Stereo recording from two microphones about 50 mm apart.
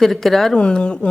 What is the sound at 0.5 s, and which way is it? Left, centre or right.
Speech, centre.